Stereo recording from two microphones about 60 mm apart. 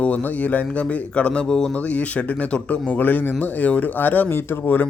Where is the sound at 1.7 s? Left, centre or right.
Left.